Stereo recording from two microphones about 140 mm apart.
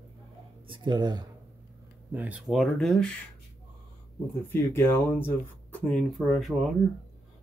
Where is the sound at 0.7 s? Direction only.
35° right (ahead or behind).